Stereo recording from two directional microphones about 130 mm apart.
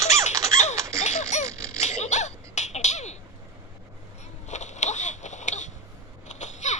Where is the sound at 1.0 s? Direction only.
65° left (ahead or behind).